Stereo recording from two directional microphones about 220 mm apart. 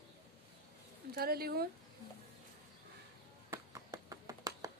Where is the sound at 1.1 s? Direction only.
45° right (ahead or behind).